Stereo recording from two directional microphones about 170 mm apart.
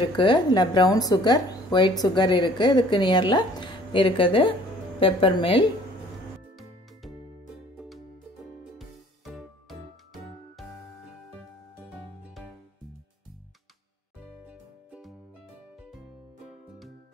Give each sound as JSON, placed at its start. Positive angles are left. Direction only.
{"t": 0.2, "sound": "a woman's voice", "side_deg": 25}
{"t": 8.7, "sound": "music", "side_deg": 0}
{"t": 14.5, "sound": "music", "side_deg": -5}